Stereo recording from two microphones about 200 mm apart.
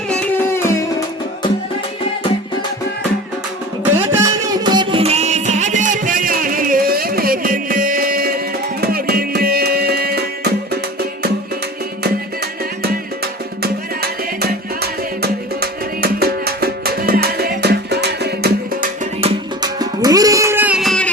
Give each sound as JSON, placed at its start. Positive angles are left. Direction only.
{"t": 0.1, "sound": "music", "side_deg": 10}
{"t": 4.2, "sound": "music", "side_deg": -20}
{"t": 14.8, "sound": "music", "side_deg": -50}
{"t": 19.2, "sound": "music", "side_deg": -20}